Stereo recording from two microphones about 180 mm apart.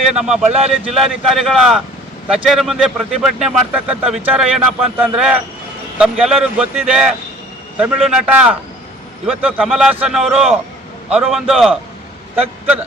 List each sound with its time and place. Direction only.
0.0 s speech: 5° right (ahead or behind)
0.5 s speech: 35° right (ahead or behind)
0.9 s a man's voice: centre (ahead or behind)